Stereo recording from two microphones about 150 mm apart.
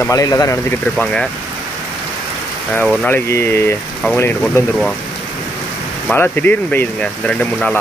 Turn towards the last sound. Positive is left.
turn(degrees=5)  # may be behind; listen again after turning